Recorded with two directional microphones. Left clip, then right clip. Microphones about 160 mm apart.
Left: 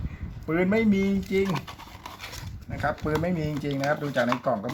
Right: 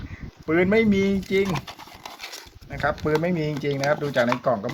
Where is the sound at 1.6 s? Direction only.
30° right (ahead or behind).